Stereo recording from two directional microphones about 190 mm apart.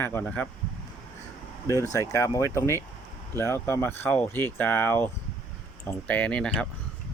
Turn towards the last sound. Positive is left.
turn(degrees=5)  # may be behind; listen again after turning